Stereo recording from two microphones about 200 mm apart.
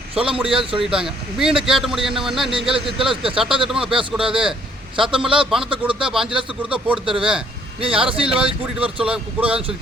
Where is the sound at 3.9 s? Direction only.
25° right (ahead or behind).